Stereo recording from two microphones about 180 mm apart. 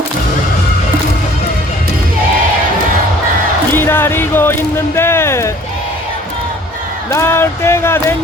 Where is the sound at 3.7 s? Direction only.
10° left (ahead or behind).